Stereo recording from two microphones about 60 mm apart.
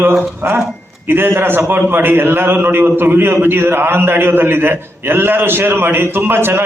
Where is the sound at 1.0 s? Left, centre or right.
Right.